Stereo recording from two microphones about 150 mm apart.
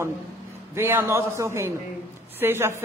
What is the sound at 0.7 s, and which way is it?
A woman's voice, 15° right (ahead or behind).